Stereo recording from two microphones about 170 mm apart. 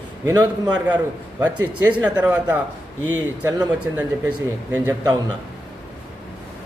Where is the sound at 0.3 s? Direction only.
25° right (ahead or behind).